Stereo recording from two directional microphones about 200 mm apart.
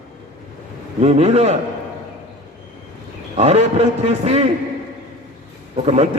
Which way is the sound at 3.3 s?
35° right (ahead or behind).